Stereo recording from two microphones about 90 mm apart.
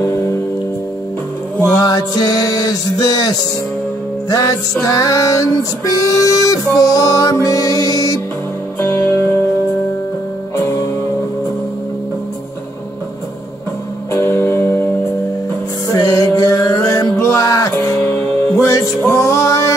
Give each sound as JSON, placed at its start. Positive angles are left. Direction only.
{"t": 0.0, "sound": "music", "side_deg": 35}
{"t": 1.8, "sound": "music", "side_deg": 45}
{"t": 8.7, "sound": "music", "side_deg": 25}
{"t": 10.5, "sound": "music", "side_deg": 35}
{"t": 14.1, "sound": "music", "side_deg": 30}
{"t": 15.9, "sound": "music", "side_deg": 40}
{"t": 17.7, "sound": "music", "side_deg": 20}